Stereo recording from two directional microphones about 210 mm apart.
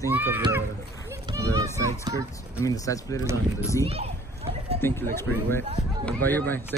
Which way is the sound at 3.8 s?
30° right (ahead or behind).